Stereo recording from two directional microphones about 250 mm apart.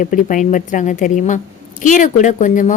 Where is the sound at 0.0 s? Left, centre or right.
Left.